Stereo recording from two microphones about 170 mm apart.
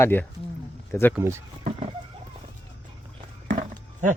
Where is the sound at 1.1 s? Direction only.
15° right (ahead or behind).